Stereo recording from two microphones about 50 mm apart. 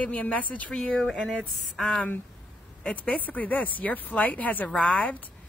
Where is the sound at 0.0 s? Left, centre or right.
Left.